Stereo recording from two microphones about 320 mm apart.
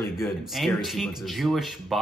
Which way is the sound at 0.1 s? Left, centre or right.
Centre.